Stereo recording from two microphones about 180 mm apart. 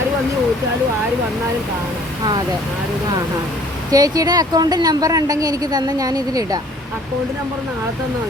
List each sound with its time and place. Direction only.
3.9 s a woman's voice: 20° right (ahead or behind)